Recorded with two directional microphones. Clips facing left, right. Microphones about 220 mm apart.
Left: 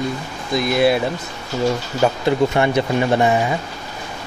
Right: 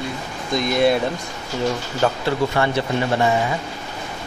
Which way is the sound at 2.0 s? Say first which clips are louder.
Left 3 dB; 10° left (ahead or behind).